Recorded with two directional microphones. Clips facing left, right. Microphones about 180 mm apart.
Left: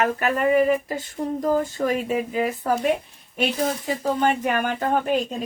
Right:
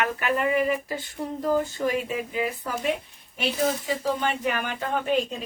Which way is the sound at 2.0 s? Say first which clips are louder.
Left 5 dB; 45° left (ahead or behind).